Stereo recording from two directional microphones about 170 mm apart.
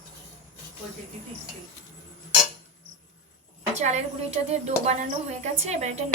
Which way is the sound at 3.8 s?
40° right (ahead or behind).